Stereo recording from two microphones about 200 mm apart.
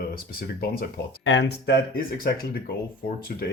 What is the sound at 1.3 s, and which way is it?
Speech, 60° left (ahead or behind).